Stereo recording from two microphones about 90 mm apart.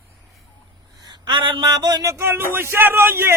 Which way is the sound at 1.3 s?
65° right (ahead or behind).